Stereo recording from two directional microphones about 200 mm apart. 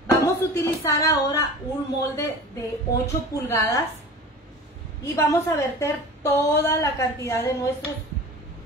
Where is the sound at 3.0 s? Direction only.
15° left (ahead or behind).